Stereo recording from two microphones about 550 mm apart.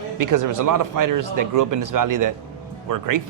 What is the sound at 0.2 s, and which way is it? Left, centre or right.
Speech, right.